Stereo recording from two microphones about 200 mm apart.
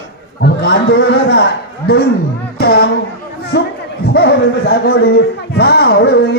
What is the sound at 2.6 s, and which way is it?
Speech, 50° left (ahead or behind).